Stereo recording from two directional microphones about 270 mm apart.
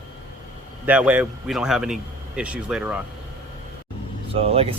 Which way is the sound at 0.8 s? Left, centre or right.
Centre.